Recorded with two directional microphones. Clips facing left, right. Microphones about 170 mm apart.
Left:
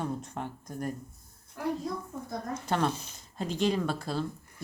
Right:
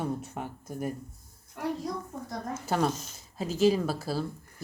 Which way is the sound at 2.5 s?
5° right (ahead or behind).